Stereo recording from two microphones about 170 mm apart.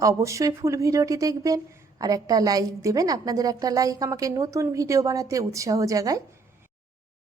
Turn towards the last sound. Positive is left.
turn(degrees=-20)  # may be behind; listen again after turning